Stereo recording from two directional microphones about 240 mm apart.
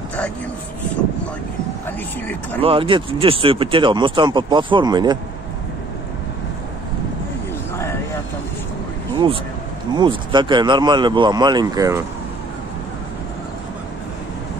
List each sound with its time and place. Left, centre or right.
2.6 s speech: right
9.9 s speech: centre